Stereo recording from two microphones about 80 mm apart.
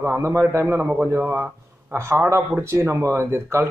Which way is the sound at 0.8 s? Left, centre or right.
Centre.